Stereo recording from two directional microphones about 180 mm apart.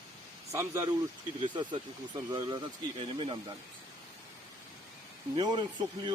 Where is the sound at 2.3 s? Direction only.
20° right (ahead or behind).